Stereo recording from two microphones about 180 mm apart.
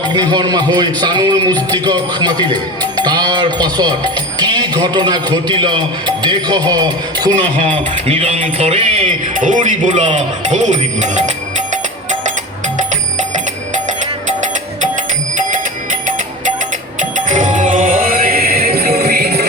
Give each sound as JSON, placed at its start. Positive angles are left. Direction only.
{"t": 0.1, "sound": "music", "side_deg": -25}
{"t": 3.0, "sound": "speech", "side_deg": -25}
{"t": 7.6, "sound": "music", "side_deg": -30}
{"t": 17.2, "sound": "music", "side_deg": -45}